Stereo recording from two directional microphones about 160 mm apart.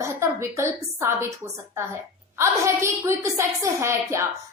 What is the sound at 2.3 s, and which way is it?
A woman's voice, 20° right (ahead or behind).